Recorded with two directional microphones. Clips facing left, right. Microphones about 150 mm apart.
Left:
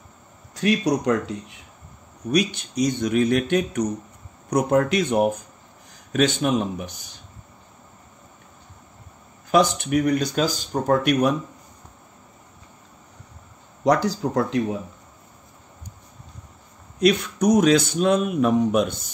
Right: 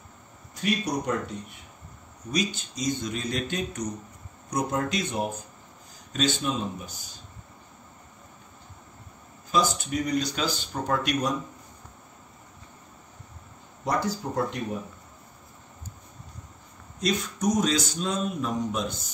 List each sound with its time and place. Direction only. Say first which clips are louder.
0.6 s speech: left 7 dB; 90° left
2.3 s a man's voice: left 7 dB; 65° left (ahead or behind)
9.5 s speech: left 7 dB; 65° left (ahead or behind)
13.8 s speech: left 8 dB; 90° left
17.0 s speech: left 8 dB; 65° left (ahead or behind)